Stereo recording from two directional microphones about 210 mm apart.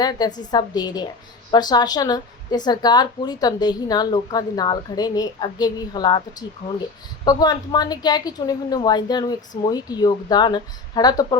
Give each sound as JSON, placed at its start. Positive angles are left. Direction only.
{"t": 0.0, "sound": "a woman's voice", "side_deg": 20}
{"t": 7.3, "sound": "a woman's voice", "side_deg": 20}